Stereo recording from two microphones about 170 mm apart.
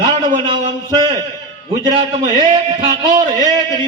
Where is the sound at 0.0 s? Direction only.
25° right (ahead or behind).